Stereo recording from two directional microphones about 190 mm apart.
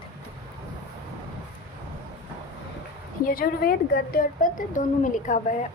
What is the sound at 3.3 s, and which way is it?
A woman's voice, 50° left (ahead or behind).